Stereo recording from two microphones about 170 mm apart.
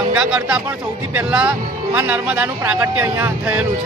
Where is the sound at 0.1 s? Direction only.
5° right (ahead or behind).